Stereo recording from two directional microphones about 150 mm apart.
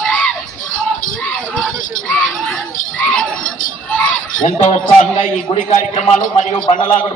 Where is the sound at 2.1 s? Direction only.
10° left (ahead or behind).